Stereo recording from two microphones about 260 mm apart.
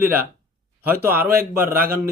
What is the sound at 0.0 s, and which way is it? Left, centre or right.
Speech, centre.